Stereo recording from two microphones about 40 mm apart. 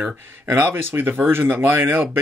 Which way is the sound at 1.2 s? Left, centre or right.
Right.